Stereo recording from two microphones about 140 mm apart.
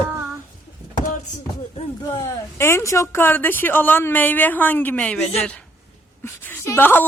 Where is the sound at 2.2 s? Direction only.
20° left (ahead or behind).